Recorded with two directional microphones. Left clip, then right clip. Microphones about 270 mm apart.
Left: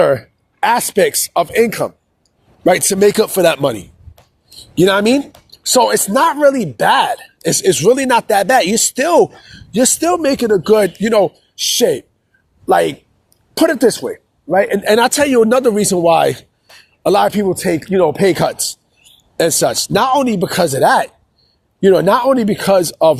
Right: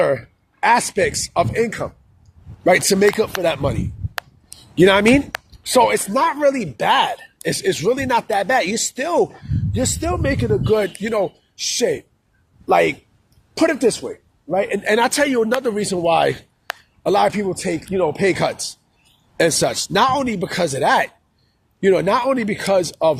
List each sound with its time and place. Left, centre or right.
0.0 s speech: left